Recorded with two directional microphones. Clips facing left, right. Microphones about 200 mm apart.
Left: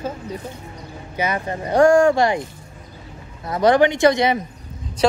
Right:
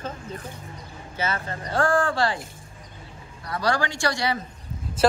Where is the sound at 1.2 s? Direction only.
15° left (ahead or behind).